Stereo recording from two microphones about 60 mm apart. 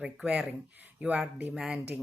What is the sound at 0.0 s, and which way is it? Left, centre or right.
Speech, centre.